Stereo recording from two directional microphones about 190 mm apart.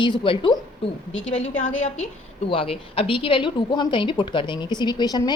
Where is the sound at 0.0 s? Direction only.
25° left (ahead or behind).